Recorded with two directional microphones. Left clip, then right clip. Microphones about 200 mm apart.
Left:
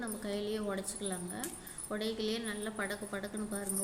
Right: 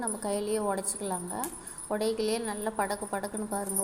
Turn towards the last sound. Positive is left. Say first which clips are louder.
# right 7 dB
turn(degrees=-10)  # may be behind; listen again after turning